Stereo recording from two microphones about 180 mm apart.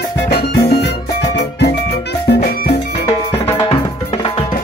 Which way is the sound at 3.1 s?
25° left (ahead or behind).